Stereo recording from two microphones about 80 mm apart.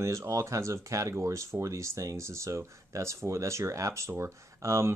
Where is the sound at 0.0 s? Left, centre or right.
Right.